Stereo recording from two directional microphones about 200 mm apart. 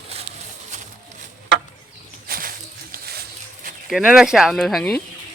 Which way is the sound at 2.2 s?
45° right (ahead or behind).